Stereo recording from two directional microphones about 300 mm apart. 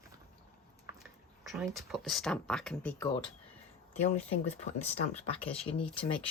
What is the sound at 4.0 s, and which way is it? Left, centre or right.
Speech, left.